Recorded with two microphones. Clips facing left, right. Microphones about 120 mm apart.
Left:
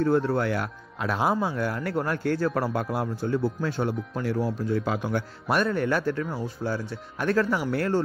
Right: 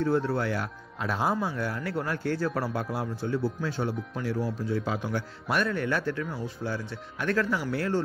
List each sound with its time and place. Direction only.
0.0 s speech: 50° left (ahead or behind)
5.6 s speech: 40° left (ahead or behind)
7.5 s speech: 50° left (ahead or behind)